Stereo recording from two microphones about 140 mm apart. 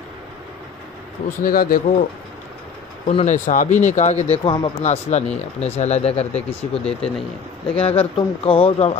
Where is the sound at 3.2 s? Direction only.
65° left (ahead or behind); by 4.6 s 40° left (ahead or behind).